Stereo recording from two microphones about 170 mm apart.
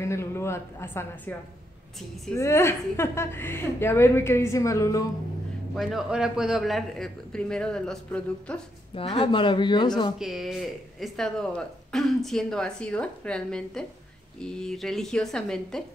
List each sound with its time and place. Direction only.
0.0 s a woman's voice: 15° left (ahead or behind)
2.3 s a woman's voice: 15° left (ahead or behind)
5.8 s speech: centre (ahead or behind)
8.9 s speech: 30° left (ahead or behind)
10.1 s speech: centre (ahead or behind)